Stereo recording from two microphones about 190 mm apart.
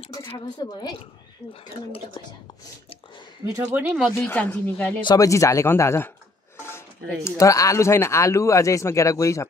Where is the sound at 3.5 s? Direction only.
10° right (ahead or behind).